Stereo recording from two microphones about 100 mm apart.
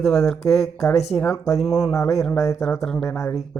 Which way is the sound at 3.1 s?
25° left (ahead or behind).